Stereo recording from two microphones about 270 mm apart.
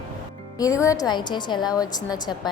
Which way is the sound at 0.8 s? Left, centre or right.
Centre.